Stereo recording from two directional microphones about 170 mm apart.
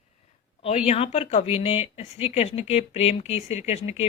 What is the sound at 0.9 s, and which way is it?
Speech, 35° left (ahead or behind).